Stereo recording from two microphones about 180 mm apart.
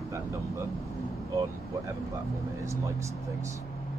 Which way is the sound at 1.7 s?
15° right (ahead or behind).